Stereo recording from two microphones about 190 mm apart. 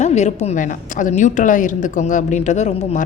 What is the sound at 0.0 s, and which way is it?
A woman's voice, 35° left (ahead or behind).